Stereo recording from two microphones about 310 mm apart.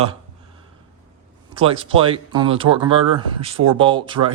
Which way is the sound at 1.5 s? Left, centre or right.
Centre.